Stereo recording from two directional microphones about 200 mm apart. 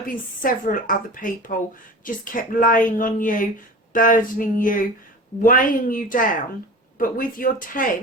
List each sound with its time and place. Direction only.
0.1 s a woman's voice: 40° left (ahead or behind)